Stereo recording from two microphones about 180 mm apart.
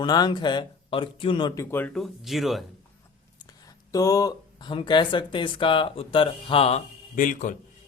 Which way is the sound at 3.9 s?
20° left (ahead or behind).